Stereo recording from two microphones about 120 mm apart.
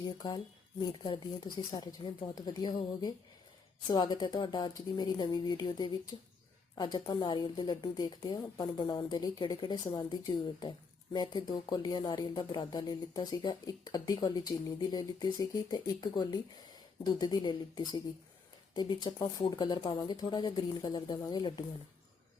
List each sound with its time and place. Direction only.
0.2 s a woman's voice: 35° left (ahead or behind)